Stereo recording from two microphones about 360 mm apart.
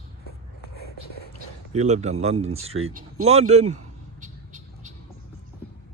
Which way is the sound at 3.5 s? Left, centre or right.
Centre.